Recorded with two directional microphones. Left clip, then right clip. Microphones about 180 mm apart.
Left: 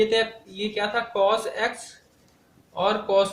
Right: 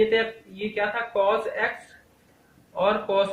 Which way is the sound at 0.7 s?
45° left (ahead or behind).